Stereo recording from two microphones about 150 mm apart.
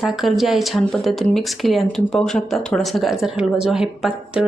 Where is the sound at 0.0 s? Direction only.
Centre (ahead or behind).